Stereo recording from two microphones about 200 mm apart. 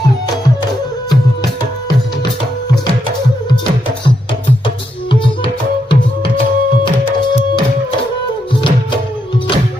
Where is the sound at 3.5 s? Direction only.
20° left (ahead or behind).